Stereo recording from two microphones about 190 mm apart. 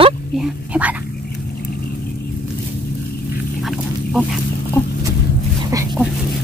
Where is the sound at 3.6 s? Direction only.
Centre (ahead or behind).